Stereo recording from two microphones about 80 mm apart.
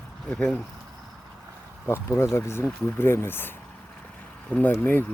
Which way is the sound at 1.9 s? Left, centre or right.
Left.